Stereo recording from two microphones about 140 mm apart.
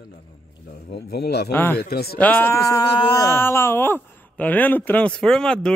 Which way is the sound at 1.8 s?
90° left.